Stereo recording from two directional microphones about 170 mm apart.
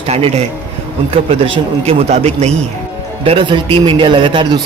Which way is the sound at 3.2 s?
30° right (ahead or behind).